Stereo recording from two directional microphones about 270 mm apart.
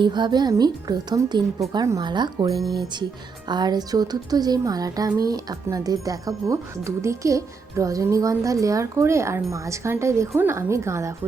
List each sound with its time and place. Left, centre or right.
0.0 s a woman's voice: centre